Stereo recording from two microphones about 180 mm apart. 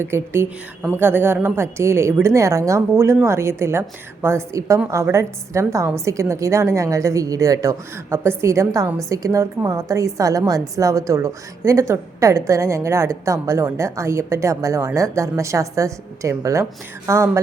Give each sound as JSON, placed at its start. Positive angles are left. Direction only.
{"t": 0.0, "sound": "a woman's voice", "side_deg": -15}